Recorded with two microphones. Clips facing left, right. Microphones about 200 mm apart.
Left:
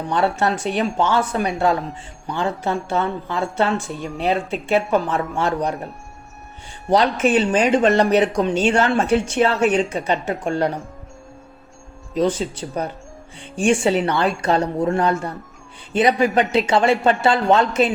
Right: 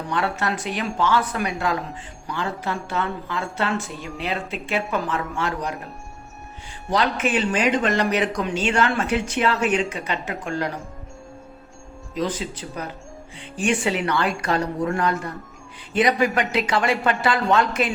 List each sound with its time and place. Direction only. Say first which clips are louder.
0.1 s speech: left 5 dB; 30° left (ahead or behind)
3.9 s speech: left 5 dB; centre (ahead or behind)
4.3 s speech: left 8 dB; 35° left (ahead or behind)
6.9 s speech: left 5 dB; 35° left (ahead or behind)
12.1 s speech: left 6 dB; 35° left (ahead or behind)